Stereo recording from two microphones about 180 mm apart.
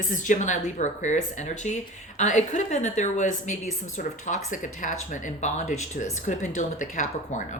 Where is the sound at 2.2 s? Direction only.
40° left (ahead or behind).